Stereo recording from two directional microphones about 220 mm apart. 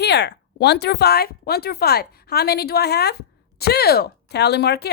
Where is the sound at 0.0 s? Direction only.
50° left (ahead or behind).